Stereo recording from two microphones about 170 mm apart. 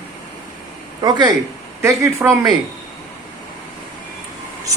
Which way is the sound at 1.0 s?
25° right (ahead or behind).